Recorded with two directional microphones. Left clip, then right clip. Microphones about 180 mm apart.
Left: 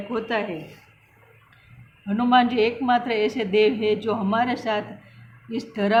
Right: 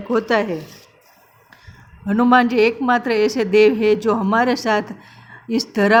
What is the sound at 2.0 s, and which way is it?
A woman's voice, 30° right (ahead or behind).